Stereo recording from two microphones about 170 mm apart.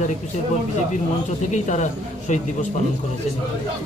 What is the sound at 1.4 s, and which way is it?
Speech, 45° left (ahead or behind).